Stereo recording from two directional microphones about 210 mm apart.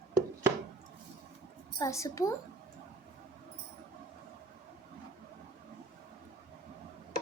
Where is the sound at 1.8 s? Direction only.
15° left (ahead or behind).